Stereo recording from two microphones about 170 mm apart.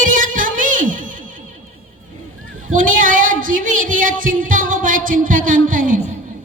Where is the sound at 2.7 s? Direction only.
50° right (ahead or behind).